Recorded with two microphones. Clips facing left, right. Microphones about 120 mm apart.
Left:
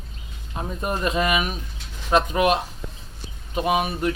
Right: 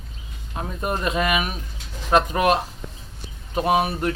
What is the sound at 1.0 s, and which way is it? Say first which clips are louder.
Speech: left 1 dB; 30° left (ahead or behind).